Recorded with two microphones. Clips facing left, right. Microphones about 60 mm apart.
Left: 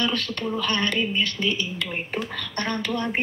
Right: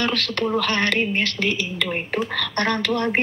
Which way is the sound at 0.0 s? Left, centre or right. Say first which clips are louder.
Right 3 dB; right.